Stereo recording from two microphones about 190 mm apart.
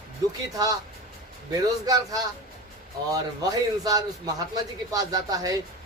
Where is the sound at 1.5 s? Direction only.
20° right (ahead or behind).